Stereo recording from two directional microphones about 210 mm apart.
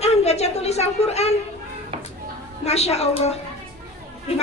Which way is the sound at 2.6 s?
30° left (ahead or behind).